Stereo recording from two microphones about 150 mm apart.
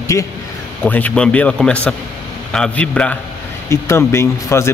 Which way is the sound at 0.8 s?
10° left (ahead or behind).